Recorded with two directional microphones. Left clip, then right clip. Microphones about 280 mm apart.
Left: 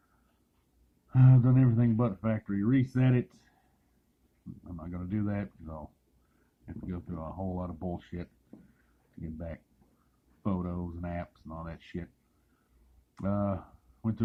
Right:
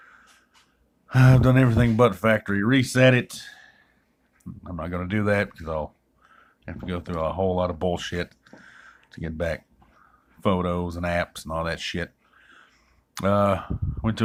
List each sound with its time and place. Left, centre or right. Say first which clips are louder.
1.0 s speech: right 9 dB; right
4.6 s speech: right 13 dB; right
6.8 s speech: right 15 dB; right
10.4 s speech: right 13 dB; right
13.1 s speech: right 13 dB; right